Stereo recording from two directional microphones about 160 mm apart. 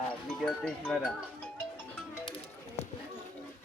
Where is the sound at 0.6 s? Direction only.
5° left (ahead or behind).